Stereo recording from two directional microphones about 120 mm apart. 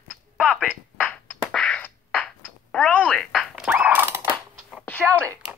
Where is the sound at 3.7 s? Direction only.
15° right (ahead or behind).